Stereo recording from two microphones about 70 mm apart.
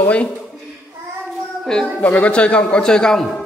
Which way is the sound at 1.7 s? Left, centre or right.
Centre.